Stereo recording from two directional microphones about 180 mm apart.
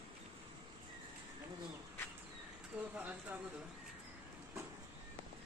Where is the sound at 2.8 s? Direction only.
10° right (ahead or behind).